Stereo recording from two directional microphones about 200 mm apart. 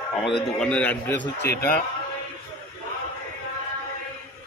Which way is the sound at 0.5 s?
5° left (ahead or behind).